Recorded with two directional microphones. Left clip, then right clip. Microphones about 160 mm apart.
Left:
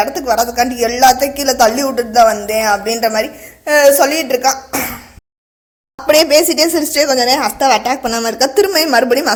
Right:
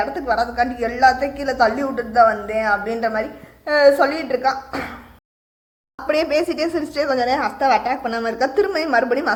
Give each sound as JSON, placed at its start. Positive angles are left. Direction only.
{"t": 0.0, "sound": "a woman's voice", "side_deg": 40}
{"t": 6.1, "sound": "a woman's voice", "side_deg": 35}